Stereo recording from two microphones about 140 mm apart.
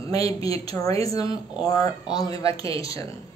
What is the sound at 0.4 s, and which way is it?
Speech, 25° left (ahead or behind).